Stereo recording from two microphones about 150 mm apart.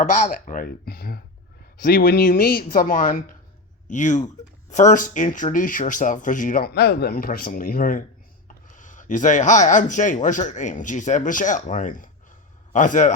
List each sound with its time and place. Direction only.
0.0 s speech: 55° left (ahead or behind); by 1.2 s 85° left
1.9 s speech: 65° left (ahead or behind)